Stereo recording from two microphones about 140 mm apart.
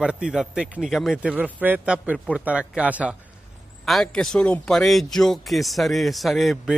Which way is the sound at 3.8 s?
Centre (ahead or behind).